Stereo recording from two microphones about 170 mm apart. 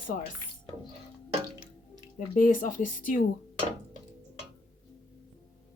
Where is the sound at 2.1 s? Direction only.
55° left (ahead or behind).